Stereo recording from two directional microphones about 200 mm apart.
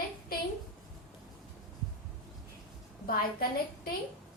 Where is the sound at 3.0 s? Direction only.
45° left (ahead or behind).